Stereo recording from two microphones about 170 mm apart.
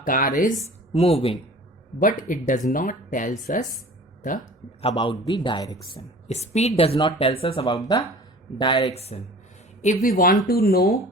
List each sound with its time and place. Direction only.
0.0 s speech: 55° left (ahead or behind)
0.9 s a woman's voice: 35° left (ahead or behind)
2.0 s speech: 50° left (ahead or behind)
4.4 s speech: 30° left (ahead or behind)
6.2 s a woman's voice: 40° left (ahead or behind)
9.0 s a woman's voice: 40° left (ahead or behind)
9.8 s speech: 50° left (ahead or behind)